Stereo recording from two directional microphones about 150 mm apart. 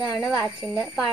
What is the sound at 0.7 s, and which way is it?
Speech, centre (ahead or behind).